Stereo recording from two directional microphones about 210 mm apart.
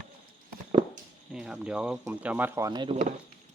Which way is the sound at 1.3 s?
5° right (ahead or behind).